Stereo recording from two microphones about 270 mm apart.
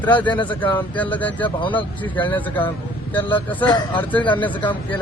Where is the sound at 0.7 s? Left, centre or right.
Centre.